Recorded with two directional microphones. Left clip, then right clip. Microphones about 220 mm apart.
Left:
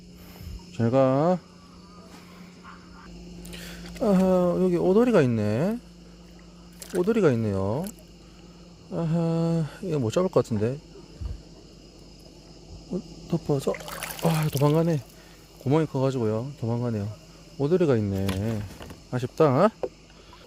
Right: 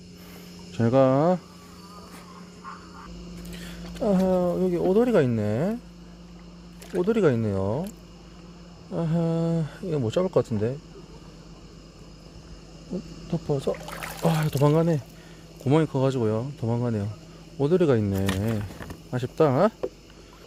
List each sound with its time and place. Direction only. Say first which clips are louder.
0.7 s speech: right 2 dB; centre (ahead or behind)
3.5 s speech: left 1 dB; 15° left (ahead or behind)
7.0 s speech: even; 10° left (ahead or behind)
13.2 s speech: even; 15° left (ahead or behind)
13.7 s pour: even; 40° left (ahead or behind)
14.2 s speech: right 1 dB; 5° left (ahead or behind)